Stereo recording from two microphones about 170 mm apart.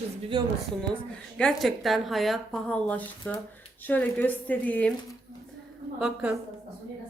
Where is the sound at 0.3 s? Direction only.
25° right (ahead or behind).